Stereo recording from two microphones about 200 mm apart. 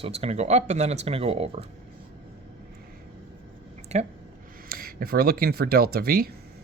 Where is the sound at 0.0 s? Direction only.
30° right (ahead or behind).